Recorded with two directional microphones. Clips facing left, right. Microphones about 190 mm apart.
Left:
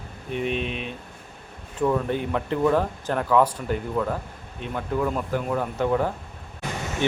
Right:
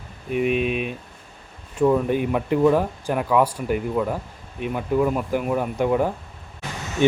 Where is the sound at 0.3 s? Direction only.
10° right (ahead or behind).